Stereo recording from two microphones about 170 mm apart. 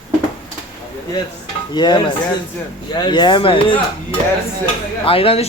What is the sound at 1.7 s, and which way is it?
Speech, 25° left (ahead or behind).